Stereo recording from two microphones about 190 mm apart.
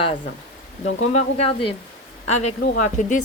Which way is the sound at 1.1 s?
30° left (ahead or behind).